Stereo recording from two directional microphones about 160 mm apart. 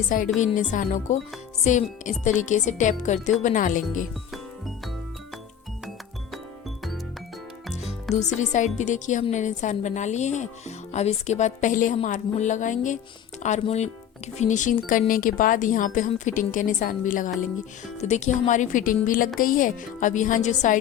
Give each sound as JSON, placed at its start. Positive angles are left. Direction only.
{"t": 0.3, "sound": "speech", "side_deg": 50}
{"t": 8.1, "sound": "speech", "side_deg": 50}